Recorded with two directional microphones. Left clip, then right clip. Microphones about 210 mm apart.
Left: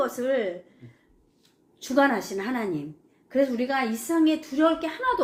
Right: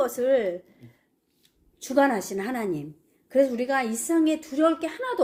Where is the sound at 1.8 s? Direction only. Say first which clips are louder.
Even; 45° right (ahead or behind).